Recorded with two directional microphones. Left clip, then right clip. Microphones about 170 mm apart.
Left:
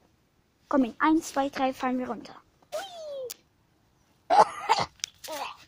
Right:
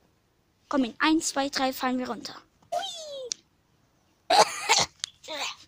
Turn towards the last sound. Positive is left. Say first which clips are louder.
# right 2 dB
turn(degrees=-5)  # may be behind; listen again after turning